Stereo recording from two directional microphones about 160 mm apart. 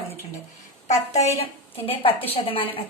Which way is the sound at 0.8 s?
45° left (ahead or behind).